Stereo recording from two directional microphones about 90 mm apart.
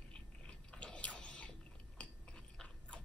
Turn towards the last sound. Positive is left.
turn(degrees=10)  # may be behind; listen again after turning